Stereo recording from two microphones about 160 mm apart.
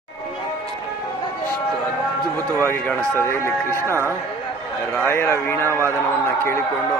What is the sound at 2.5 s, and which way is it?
Speech, 15° left (ahead or behind).